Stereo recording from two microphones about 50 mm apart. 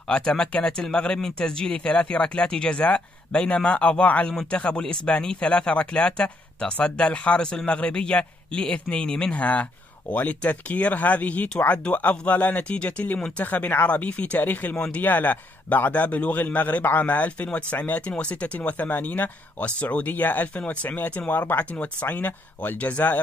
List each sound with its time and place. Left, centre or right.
0.1 s a man's voice: centre; by 23.2 s left